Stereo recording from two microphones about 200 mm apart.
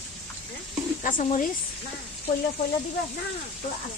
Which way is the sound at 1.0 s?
40° left (ahead or behind).